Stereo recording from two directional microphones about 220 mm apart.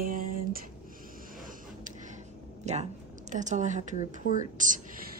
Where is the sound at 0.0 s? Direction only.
40° right (ahead or behind).